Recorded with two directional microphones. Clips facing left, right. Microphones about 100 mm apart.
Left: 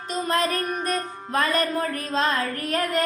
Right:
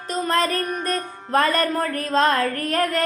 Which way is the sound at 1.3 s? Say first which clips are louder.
Right 4 dB; 45° right (ahead or behind).